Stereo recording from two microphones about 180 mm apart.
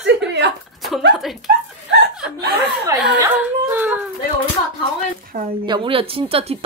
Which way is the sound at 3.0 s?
10° right (ahead or behind).